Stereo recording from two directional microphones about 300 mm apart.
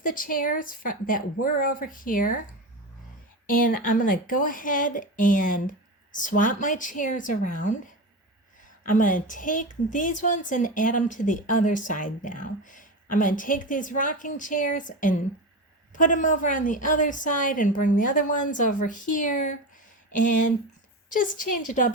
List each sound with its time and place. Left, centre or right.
0.0 s a woman's voice: left
3.4 s a woman's voice: left
9.0 s a woman's voice: left
21.1 s a woman's voice: left